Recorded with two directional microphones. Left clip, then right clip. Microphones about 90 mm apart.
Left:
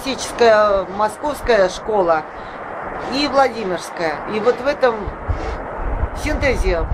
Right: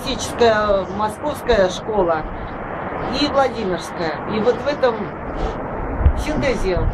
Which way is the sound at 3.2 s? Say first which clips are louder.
Left 2 dB; 30° left (ahead or behind).